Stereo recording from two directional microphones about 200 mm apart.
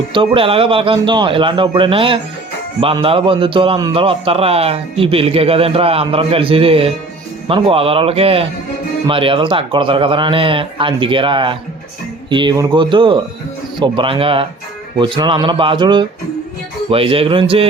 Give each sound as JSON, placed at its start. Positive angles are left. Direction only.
{"t": 0.1, "sound": "a man's voice", "side_deg": -25}